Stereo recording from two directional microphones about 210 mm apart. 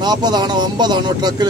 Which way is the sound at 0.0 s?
20° right (ahead or behind).